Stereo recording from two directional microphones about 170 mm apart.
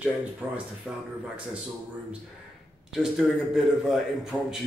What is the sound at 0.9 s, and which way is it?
Speech, 5° right (ahead or behind).